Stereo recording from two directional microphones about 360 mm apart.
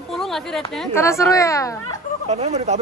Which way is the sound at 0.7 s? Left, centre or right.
Centre.